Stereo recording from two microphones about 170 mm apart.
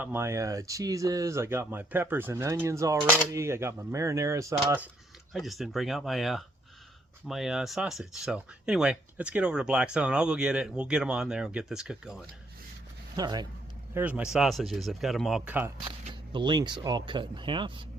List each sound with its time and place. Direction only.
0.0 s speech: 15° right (ahead or behind)
5.3 s speech: centre (ahead or behind)
13.1 s speech: 25° right (ahead or behind)
13.9 s speech: 10° right (ahead or behind)
16.3 s speech: 25° right (ahead or behind)